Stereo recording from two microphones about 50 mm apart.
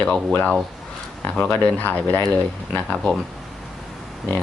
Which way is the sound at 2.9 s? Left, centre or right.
Centre.